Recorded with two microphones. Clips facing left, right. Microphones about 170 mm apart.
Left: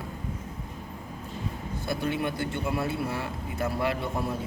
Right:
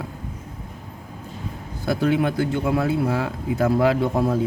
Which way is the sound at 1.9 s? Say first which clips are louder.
Right 9 dB; 90° right.